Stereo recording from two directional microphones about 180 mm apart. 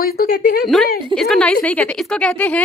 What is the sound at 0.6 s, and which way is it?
A woman's voice, centre (ahead or behind).